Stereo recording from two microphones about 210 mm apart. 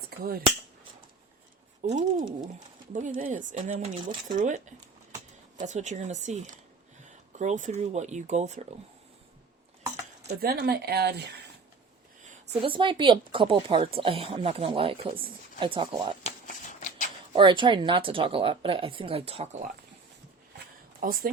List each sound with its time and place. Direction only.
0.2 s speech: 45° right (ahead or behind)
1.9 s speech: 40° right (ahead or behind)
10.4 s speech: 50° right (ahead or behind)
12.6 s speech: 25° right (ahead or behind)
16.2 s shuffling cards: 35° left (ahead or behind)
17.3 s speech: 25° right (ahead or behind)
21.0 s speech: 45° right (ahead or behind)